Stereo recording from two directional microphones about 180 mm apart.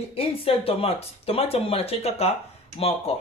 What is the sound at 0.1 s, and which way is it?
Speech, 30° left (ahead or behind).